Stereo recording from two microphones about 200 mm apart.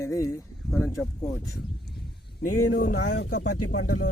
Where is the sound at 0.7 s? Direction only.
Centre (ahead or behind).